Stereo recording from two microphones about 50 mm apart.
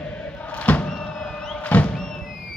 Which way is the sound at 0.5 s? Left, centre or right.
Left.